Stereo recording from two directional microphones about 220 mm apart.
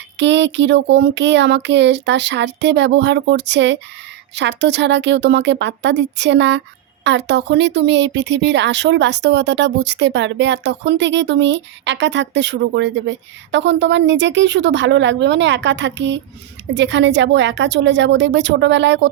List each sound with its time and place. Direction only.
0.2 s speech: 55° right (ahead or behind)